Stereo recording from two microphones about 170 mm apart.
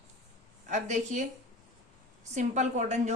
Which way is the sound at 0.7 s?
45° right (ahead or behind).